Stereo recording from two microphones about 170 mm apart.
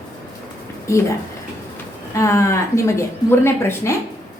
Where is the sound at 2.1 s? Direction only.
15° left (ahead or behind).